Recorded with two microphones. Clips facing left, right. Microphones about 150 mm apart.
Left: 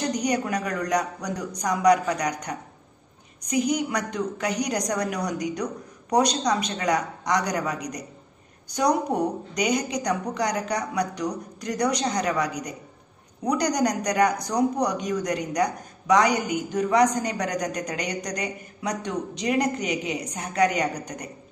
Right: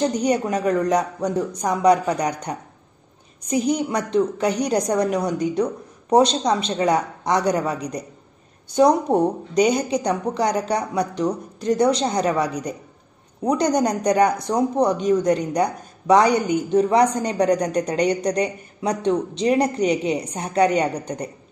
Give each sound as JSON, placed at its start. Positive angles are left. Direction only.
{"t": 0.0, "sound": "a woman's voice", "side_deg": -30}